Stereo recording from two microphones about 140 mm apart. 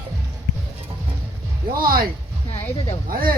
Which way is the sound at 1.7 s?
90° right.